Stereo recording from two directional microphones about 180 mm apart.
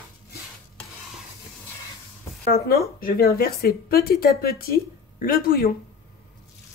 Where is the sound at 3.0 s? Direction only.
55° left (ahead or behind).